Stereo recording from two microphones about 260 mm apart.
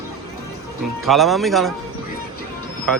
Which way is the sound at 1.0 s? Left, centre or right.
Centre.